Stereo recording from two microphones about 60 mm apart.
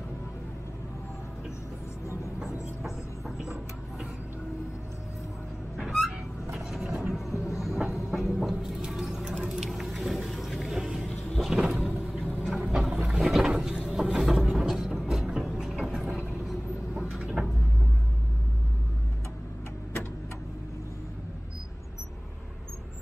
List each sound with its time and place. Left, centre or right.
2.8 s music: centre
5.8 s a sound: centre
6.6 s vehicle: centre
8.8 s music: centre
11.3 s vehicle: centre
12.3 s a sound: right
12.5 s boat: centre
14.1 s vehicle: centre
14.5 s music: centre
17.1 s vehicle: centre